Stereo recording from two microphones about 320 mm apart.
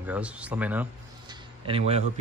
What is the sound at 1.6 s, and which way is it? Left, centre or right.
Speech, centre.